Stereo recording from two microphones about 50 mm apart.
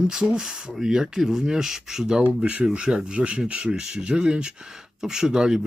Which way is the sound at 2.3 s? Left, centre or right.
Right.